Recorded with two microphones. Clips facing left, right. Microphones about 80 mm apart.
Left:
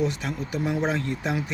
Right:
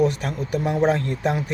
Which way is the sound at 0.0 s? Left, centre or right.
Right.